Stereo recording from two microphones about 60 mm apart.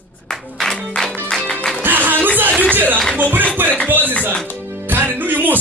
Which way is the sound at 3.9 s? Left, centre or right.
Right.